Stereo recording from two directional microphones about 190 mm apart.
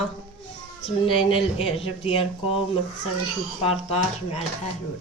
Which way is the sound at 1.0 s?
25° left (ahead or behind).